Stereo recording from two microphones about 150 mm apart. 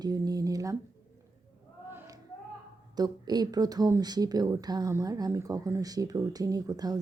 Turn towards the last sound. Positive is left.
turn(degrees=-25)  # may be behind; listen again after turning